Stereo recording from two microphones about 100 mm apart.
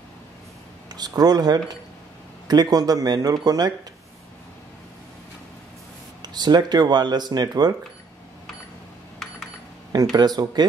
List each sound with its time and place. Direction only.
0.8 s a man's voice: 40° right (ahead or behind)
6.2 s speech: 45° right (ahead or behind)
10.1 s speech: 45° right (ahead or behind)